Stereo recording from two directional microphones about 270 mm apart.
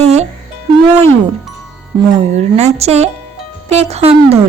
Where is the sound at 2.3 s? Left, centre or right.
Right.